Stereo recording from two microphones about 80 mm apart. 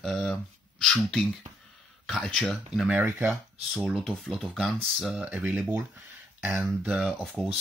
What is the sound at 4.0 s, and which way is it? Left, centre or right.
Speech, centre.